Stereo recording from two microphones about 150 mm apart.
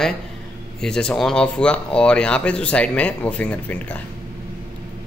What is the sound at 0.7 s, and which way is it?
Speech, 5° left (ahead or behind).